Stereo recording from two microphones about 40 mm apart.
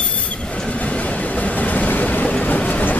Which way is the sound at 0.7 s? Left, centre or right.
Left.